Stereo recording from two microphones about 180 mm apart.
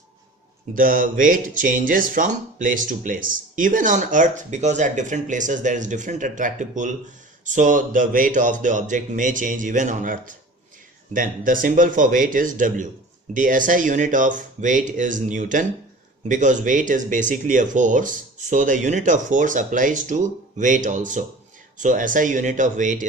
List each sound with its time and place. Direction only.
0.8 s speech: 50° right (ahead or behind)